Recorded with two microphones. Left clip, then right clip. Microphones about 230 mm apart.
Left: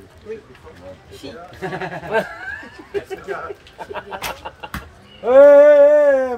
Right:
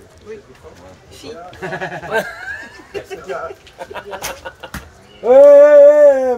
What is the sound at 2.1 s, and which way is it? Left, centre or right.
Speech, left.